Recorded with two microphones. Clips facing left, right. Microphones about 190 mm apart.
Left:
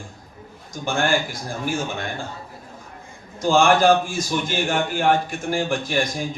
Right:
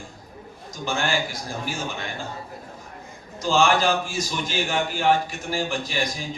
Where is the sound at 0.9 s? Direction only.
50° left (ahead or behind).